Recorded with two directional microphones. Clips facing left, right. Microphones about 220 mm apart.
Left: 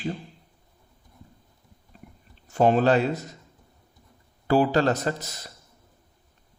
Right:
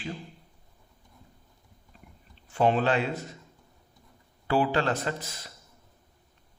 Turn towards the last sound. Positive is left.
turn(degrees=40)  # may be behind; listen again after turning